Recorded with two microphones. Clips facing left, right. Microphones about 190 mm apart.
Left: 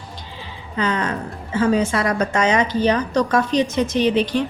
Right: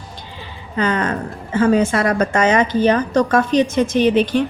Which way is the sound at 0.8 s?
55° right (ahead or behind).